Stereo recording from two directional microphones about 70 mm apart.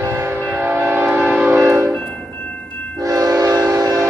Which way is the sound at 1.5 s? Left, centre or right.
Right.